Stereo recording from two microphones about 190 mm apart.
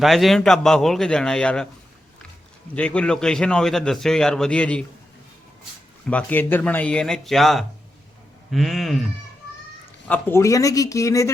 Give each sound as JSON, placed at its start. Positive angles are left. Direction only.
{"t": 0.0, "sound": "a man's voice", "side_deg": 0}
{"t": 2.7, "sound": "a man's voice", "side_deg": 5}
{"t": 6.1, "sound": "a man's voice", "side_deg": 5}
{"t": 10.1, "sound": "speech", "side_deg": 10}